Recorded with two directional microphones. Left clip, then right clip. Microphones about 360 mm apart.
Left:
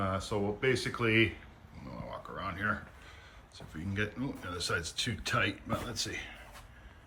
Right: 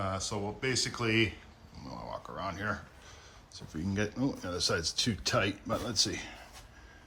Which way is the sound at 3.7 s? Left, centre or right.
Centre.